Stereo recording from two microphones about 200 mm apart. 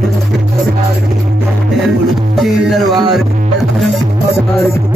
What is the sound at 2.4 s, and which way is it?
Music, centre (ahead or behind).